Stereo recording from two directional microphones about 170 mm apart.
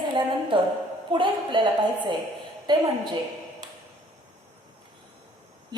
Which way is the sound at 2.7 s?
25° right (ahead or behind).